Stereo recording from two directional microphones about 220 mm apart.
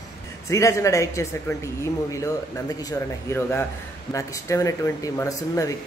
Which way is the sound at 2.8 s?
15° left (ahead or behind).